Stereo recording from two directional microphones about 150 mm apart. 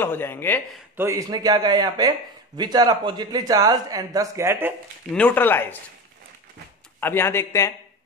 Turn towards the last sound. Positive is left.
turn(degrees=20)  # may be behind; listen again after turning